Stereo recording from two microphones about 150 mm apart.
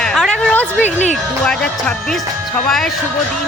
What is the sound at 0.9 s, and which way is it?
Speech, 50° left (ahead or behind).